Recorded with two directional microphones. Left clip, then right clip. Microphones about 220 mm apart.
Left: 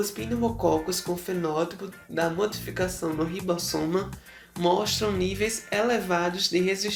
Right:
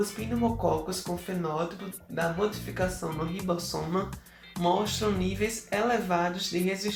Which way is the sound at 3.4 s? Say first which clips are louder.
Left 2 dB; 40° left (ahead or behind).